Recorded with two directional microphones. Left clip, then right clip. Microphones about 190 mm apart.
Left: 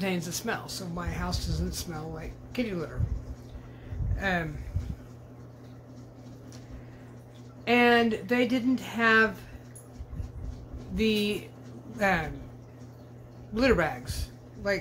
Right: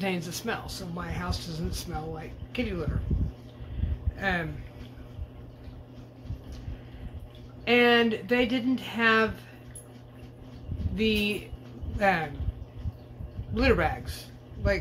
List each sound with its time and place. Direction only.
0.0 s speech: 10° left (ahead or behind)
4.2 s speech: 10° left (ahead or behind)
7.6 s speech: 5° left (ahead or behind)
11.0 s speech: 10° left (ahead or behind)
13.6 s speech: 10° left (ahead or behind)